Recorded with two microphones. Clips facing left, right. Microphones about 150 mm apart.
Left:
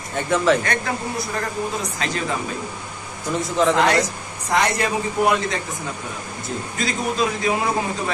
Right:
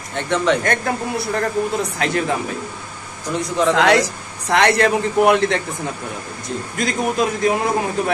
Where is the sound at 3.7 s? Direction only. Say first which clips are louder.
Right 7 dB; 90° right; by 5.6 s 65° right (ahead or behind).